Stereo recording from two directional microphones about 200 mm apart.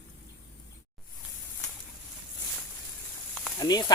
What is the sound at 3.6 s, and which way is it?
Snake, 20° left (ahead or behind).